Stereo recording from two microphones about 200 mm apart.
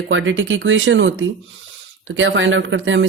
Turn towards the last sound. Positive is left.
turn(degrees=-70)  # may be behind; listen again after turning